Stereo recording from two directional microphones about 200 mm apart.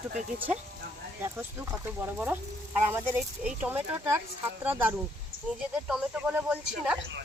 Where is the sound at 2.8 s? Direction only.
10° right (ahead or behind).